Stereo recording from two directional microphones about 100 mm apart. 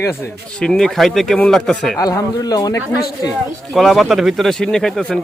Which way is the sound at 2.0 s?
35° left (ahead or behind).